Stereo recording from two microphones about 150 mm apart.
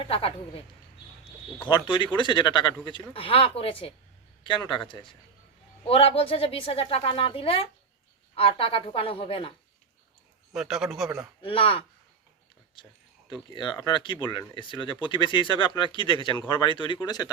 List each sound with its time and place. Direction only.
0.0 s speech: 40° left (ahead or behind)
1.6 s speech: 30° left (ahead or behind)
10.5 s a man's voice: 5° right (ahead or behind)
11.4 s speech: 35° left (ahead or behind)
13.5 s speech: 30° left (ahead or behind)